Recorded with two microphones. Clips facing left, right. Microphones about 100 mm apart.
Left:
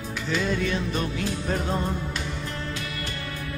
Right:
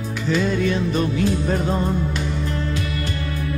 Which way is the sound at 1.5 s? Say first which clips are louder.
Right 5 dB; 20° right (ahead or behind).